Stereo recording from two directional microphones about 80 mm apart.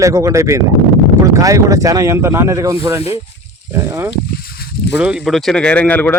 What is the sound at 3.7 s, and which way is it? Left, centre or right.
Speech, right.